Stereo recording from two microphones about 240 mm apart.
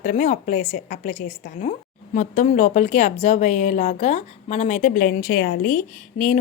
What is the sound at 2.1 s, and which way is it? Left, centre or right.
A woman's voice, left.